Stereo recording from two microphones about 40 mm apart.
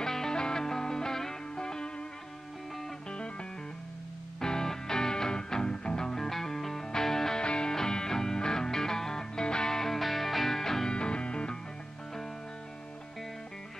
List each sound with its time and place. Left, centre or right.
0.0 s music: centre
4.4 s music: centre
7.4 s music: left
11.0 s music: left